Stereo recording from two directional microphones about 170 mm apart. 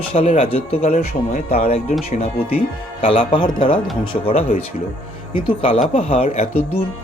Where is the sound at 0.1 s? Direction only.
35° left (ahead or behind).